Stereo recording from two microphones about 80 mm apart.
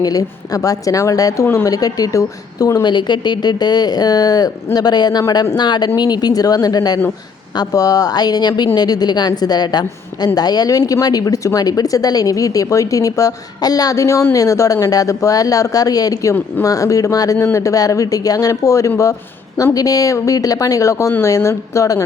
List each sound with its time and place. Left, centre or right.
0.0 s speech: left
2.8 s a woman's voice: left